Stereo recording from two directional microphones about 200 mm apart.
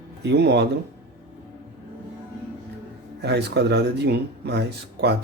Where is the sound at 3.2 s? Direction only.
55° right (ahead or behind).